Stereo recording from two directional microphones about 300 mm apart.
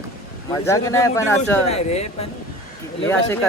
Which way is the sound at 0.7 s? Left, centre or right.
Centre.